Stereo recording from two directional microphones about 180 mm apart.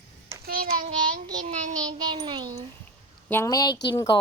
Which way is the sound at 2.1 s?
25° right (ahead or behind).